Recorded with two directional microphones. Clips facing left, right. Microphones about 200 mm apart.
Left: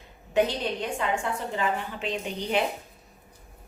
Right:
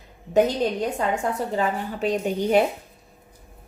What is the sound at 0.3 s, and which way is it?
A woman's voice, 40° right (ahead or behind).